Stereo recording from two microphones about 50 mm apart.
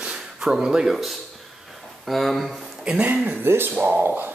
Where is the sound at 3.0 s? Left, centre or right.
Right.